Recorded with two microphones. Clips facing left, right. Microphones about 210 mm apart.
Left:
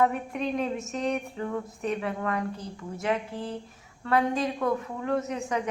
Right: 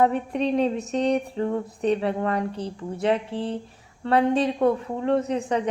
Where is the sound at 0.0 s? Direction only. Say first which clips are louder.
Right 4 dB; 30° right (ahead or behind).